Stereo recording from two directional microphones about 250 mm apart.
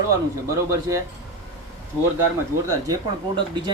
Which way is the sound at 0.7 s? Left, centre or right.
Centre.